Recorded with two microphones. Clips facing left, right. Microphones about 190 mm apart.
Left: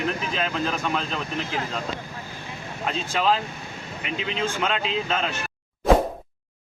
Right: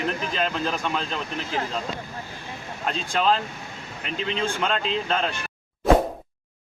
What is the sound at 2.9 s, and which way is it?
Speech, 5° left (ahead or behind).